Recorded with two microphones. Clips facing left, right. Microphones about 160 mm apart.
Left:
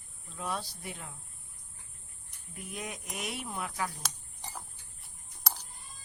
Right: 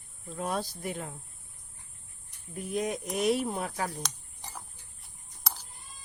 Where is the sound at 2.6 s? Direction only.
35° right (ahead or behind).